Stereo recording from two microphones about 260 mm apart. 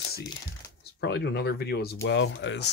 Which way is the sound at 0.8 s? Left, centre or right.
Left.